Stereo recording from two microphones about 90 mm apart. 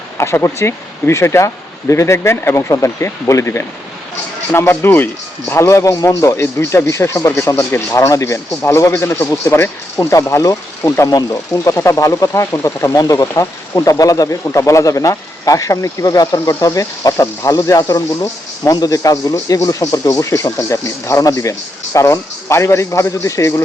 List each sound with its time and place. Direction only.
0.2 s speech: 30° left (ahead or behind)